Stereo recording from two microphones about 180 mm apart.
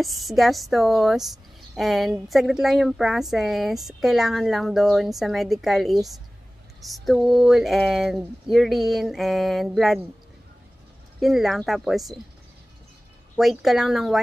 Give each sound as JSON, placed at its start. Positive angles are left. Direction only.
{"t": 0.0, "sound": "a woman's voice", "side_deg": 0}
{"t": 11.1, "sound": "a woman's voice", "side_deg": 0}
{"t": 13.4, "sound": "a woman's voice", "side_deg": 0}